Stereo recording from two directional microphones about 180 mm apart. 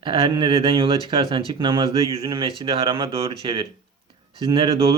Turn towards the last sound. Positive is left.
turn(degrees=-30)  # may be behind; listen again after turning